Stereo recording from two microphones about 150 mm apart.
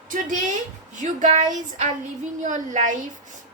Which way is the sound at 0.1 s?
60° right (ahead or behind).